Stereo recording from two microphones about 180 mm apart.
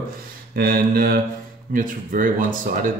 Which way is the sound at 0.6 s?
55° right (ahead or behind).